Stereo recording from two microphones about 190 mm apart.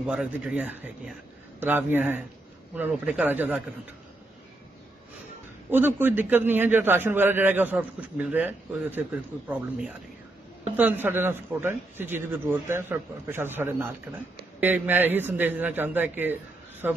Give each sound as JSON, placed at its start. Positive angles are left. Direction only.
{"t": 0.0, "sound": "a man's voice", "side_deg": -5}
{"t": 5.7, "sound": "a man's voice", "side_deg": -10}